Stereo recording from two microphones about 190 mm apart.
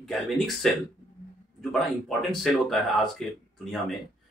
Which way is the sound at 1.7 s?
Centre (ahead or behind).